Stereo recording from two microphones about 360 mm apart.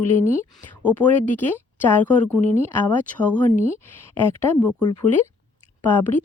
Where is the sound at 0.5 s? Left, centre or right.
Centre.